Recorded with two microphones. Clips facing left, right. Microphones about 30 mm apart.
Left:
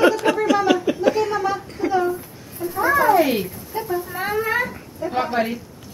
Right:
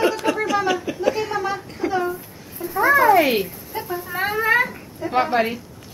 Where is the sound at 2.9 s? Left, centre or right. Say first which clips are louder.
Right 2 dB; centre.